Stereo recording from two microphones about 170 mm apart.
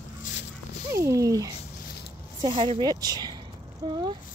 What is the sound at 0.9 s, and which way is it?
Speech, 20° right (ahead or behind).